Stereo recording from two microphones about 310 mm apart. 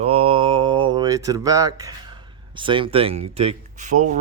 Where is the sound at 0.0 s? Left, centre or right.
Centre.